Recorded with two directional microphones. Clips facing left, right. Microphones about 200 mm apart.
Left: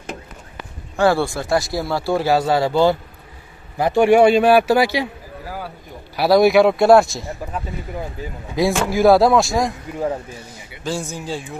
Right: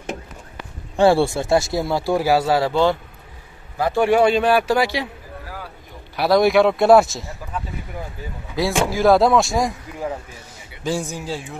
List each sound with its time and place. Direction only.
0.9 s speech: 25° right (ahead or behind); by 3.0 s 5° left (ahead or behind)
3.7 s a man's voice: 15° left (ahead or behind)
6.1 s speech: 5° left (ahead or behind)
8.5 s speech: 15° left (ahead or behind); by 9.8 s centre (ahead or behind)
10.8 s a man's voice: 15° right (ahead or behind)
11.1 s speech: 5° right (ahead or behind)